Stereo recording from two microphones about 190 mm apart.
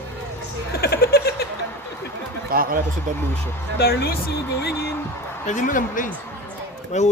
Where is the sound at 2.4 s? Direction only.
50° right (ahead or behind).